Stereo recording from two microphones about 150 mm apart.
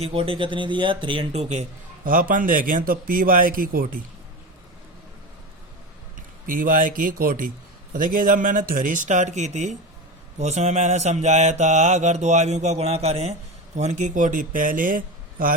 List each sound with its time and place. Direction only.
0.0 s speech: 40° right (ahead or behind)
2.0 s a man's voice: 65° right (ahead or behind)
6.5 s a man's voice: 70° right (ahead or behind); by 9.7 s 50° right (ahead or behind)
10.3 s mantra: 50° right (ahead or behind)
13.7 s speech: 50° right (ahead or behind)